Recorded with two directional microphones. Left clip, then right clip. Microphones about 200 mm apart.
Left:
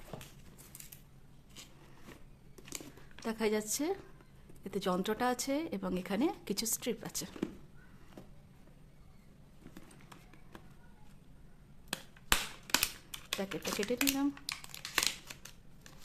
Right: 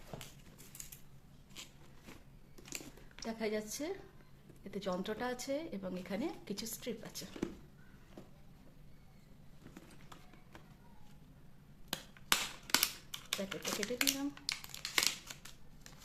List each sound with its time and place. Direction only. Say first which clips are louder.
1.6 s biting: right 1 dB; 10° left (ahead or behind)
3.2 s speech: left 5 dB; 40° left (ahead or behind)
9.7 s clip-clop: even; 15° left (ahead or behind)
11.9 s a sound: left 2 dB; 10° left (ahead or behind)
13.5 s speech: left 2 dB; 10° left (ahead or behind)
13.8 s crumpling: left 3 dB; 10° left (ahead or behind)